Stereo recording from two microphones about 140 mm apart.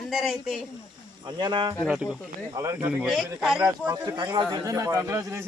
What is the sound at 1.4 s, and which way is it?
A man's voice, 30° right (ahead or behind).